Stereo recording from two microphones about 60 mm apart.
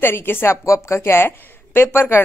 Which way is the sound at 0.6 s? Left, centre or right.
Left.